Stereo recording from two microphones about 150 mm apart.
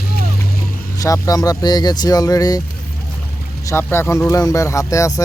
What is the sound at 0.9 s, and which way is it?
Speech, 25° left (ahead or behind).